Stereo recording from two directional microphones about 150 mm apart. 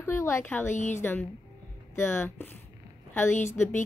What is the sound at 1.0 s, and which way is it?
A woman's voice, 10° left (ahead or behind).